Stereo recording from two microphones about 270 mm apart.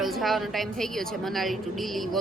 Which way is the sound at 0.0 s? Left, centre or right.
Centre.